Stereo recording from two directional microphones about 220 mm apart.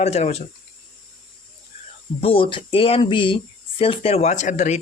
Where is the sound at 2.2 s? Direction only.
25° left (ahead or behind).